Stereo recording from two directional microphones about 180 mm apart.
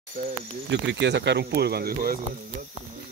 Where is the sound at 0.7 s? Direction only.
75° right (ahead or behind); by 2.1 s 55° right (ahead or behind).